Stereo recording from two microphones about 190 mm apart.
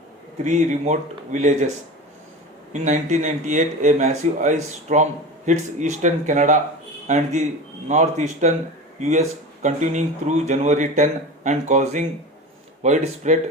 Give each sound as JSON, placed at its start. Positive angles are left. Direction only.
{"t": 0.4, "sound": "speech", "side_deg": -40}
{"t": 2.7, "sound": "speech", "side_deg": -40}